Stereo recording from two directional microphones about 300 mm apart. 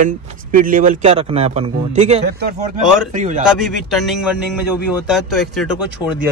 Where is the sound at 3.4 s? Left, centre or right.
Centre.